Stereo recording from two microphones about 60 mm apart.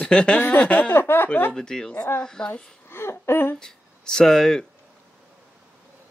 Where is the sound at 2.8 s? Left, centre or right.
Left.